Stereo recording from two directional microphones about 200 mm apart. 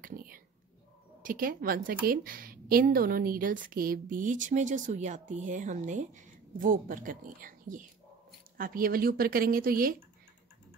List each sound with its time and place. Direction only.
0.0 s a woman's voice: 45° right (ahead or behind)